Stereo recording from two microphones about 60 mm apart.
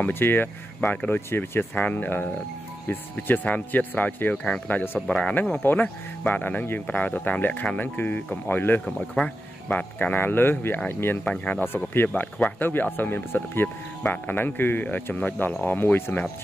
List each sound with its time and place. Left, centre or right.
0.1 s speech: left
5.0 s speech: centre; by 8.8 s left
8.8 s speech: centre
9.7 s speech: left
12.1 s speech: left